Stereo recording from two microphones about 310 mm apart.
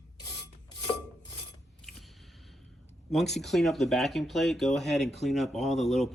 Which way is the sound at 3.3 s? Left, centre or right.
Centre.